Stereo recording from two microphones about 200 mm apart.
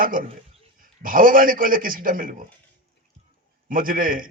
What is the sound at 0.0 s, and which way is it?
A man's voice, 45° right (ahead or behind).